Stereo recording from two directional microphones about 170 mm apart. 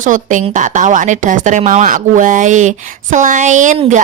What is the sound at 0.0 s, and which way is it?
Speech, 50° right (ahead or behind).